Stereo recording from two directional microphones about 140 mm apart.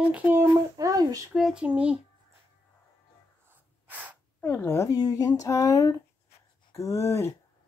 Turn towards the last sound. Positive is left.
turn(degrees=20)  # may be behind; listen again after turning